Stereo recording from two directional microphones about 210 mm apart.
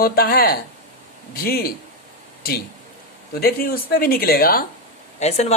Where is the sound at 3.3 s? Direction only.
45° left (ahead or behind).